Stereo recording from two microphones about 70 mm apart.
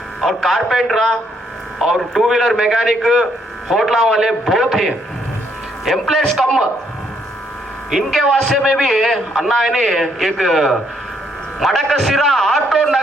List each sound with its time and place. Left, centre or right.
0.2 s a man's voice: centre
7.9 s a man's voice: centre